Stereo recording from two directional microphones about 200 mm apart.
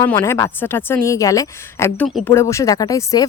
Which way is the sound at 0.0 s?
15° left (ahead or behind).